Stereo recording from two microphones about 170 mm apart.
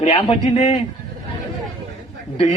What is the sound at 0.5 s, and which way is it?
Speech, 45° left (ahead or behind).